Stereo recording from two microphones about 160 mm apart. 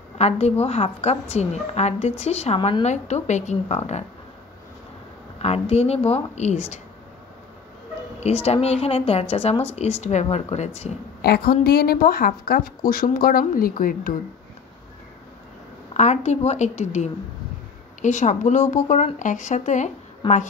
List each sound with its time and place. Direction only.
0.2 s a woman's voice: 40° left (ahead or behind)
5.4 s a woman's voice: 40° left (ahead or behind)
8.2 s a woman's voice: 40° left (ahead or behind)
11.2 s a woman's voice: 80° left; by 14.1 s 60° left (ahead or behind)
15.9 s a woman's voice: 45° left (ahead or behind)
20.2 s a woman's voice: 30° left (ahead or behind)